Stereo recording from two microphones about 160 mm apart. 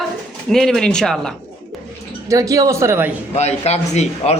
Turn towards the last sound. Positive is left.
turn(degrees=45)  # may be behind; listen again after turning